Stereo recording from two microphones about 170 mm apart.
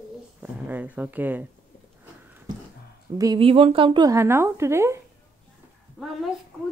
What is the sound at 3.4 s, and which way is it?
A woman's voice, 35° right (ahead or behind).